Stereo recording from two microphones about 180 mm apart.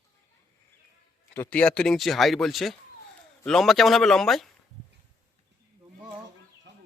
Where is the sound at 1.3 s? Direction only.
10° left (ahead or behind).